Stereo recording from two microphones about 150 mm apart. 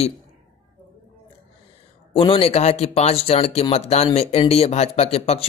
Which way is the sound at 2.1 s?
40° left (ahead or behind).